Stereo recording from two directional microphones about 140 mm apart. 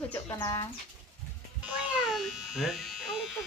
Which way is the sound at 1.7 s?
5° right (ahead or behind).